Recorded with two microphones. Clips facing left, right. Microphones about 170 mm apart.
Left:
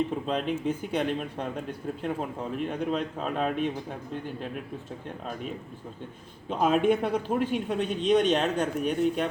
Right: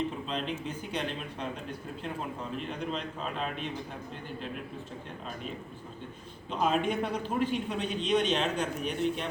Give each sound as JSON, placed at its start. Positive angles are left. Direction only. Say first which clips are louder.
{"t": 0.3, "sound": "speech", "louder": "left 7 dB", "side_deg": 50}
{"t": 6.5, "sound": "speech", "louder": "left 6 dB", "side_deg": 50}